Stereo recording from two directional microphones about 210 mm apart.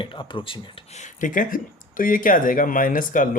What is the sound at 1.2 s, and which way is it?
Speech, 40° left (ahead or behind).